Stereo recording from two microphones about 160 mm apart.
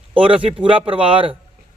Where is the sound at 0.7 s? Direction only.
35° right (ahead or behind).